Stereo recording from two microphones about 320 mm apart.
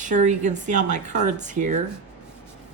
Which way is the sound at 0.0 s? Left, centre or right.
Right.